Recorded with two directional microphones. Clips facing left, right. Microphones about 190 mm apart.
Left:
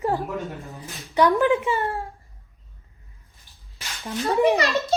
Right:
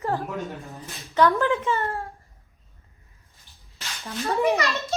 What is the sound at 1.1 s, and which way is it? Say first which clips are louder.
Speech: left 2 dB; 15° left (ahead or behind).